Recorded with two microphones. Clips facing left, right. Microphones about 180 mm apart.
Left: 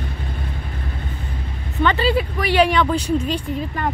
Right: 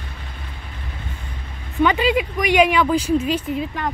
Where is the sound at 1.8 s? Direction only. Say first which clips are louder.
Right 1 dB; 10° right (ahead or behind).